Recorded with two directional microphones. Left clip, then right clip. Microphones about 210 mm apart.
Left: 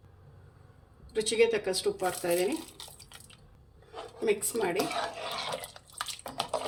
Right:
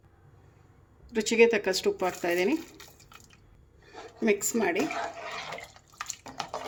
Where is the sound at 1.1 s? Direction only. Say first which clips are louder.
Right 4 dB; 45° right (ahead or behind).